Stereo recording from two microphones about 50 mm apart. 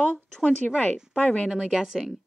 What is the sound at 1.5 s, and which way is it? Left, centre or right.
Speech, centre.